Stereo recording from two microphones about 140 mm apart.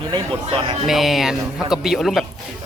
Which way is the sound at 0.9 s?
Centre (ahead or behind).